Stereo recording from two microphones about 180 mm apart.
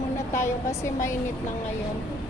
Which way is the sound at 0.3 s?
15° left (ahead or behind).